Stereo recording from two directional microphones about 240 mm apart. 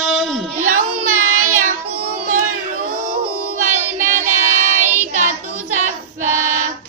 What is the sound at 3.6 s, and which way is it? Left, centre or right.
Child singing, right.